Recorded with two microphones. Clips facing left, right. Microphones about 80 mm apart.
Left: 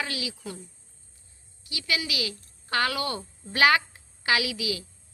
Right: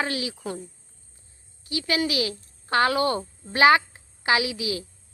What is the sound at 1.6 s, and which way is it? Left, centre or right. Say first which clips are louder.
Speech: right 6 dB; right.